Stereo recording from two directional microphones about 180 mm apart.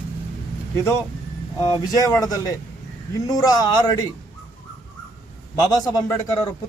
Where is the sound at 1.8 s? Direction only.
20° left (ahead or behind).